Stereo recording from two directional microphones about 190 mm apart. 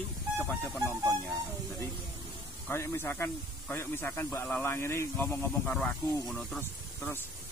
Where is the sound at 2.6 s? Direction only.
10° left (ahead or behind).